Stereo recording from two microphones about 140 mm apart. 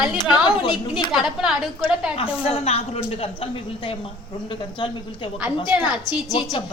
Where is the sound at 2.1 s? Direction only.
40° left (ahead or behind).